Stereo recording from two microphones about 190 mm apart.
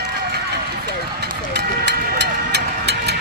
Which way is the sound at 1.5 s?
60° right (ahead or behind).